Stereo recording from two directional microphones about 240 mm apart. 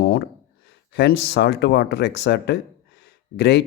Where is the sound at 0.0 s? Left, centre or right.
Left.